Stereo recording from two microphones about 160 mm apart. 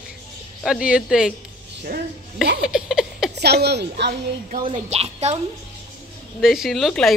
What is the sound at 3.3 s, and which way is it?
Speech, 90° right.